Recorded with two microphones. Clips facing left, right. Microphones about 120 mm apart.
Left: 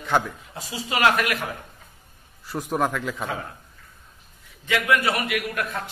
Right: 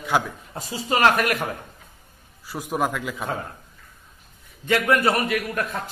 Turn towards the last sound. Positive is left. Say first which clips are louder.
# right 2 dB
turn(degrees=-35)  # may be behind; listen again after turning